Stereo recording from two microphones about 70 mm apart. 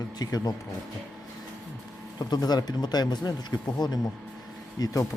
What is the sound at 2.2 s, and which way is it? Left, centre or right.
Speech, left.